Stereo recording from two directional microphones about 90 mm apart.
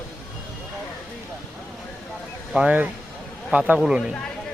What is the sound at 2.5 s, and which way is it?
Speech, 15° right (ahead or behind).